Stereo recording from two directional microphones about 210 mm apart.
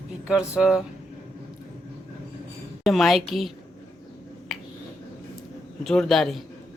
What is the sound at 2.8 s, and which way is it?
Speech, centre (ahead or behind).